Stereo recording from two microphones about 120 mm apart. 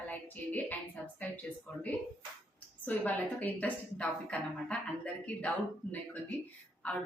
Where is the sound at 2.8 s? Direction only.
15° left (ahead or behind).